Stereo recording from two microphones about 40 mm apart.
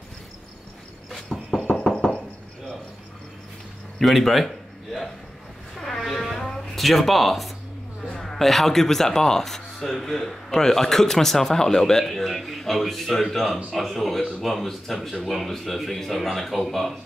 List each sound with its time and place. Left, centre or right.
1.1 s a sound: centre
1.9 s knock: centre
4.0 s speech: centre
5.8 s a sound: centre
6.2 s music: centre
8.2 s speech: centre